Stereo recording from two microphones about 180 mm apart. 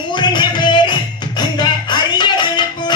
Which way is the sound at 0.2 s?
25° left (ahead or behind).